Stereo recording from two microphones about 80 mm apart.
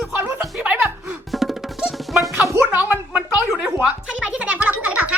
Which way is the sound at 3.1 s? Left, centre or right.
Centre.